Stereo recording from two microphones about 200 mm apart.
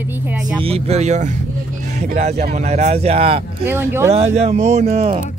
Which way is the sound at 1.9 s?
35° right (ahead or behind).